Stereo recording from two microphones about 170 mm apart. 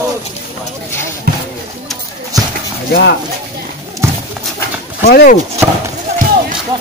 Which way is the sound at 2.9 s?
70° left (ahead or behind).